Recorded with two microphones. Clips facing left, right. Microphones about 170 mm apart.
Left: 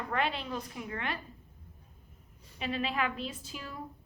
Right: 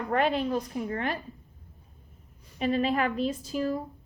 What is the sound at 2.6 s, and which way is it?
A woman's voice, 45° right (ahead or behind).